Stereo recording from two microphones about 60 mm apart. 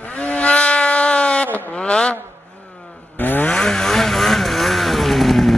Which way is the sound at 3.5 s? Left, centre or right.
Centre.